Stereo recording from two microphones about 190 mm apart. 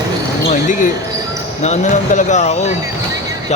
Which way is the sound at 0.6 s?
45° left (ahead or behind).